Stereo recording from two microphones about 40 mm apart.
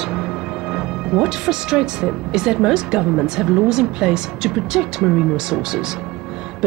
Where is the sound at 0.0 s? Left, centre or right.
Centre.